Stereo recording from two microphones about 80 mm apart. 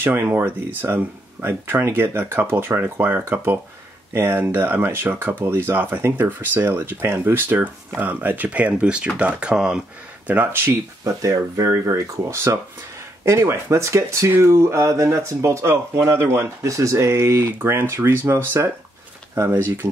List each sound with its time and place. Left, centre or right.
0.0 s speech: right; by 9.8 s centre
10.2 s speech: right
11.2 s speech: right